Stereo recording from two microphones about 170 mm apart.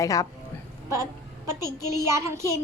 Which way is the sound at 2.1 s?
15° right (ahead or behind).